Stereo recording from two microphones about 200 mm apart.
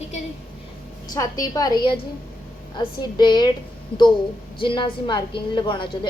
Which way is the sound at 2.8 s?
20° left (ahead or behind).